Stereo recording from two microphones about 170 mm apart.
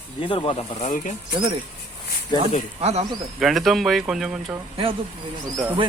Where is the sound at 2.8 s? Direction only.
40° right (ahead or behind).